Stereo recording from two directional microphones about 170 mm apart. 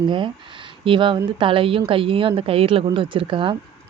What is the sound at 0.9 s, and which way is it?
Speech, 30° right (ahead or behind).